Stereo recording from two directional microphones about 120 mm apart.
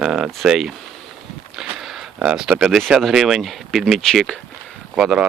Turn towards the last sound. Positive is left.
turn(degrees=-5)  # may be behind; listen again after turning